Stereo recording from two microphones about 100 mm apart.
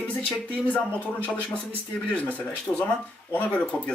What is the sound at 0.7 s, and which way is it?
Speech, 15° left (ahead or behind).